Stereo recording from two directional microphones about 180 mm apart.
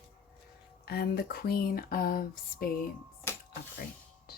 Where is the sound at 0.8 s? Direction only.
60° left (ahead or behind).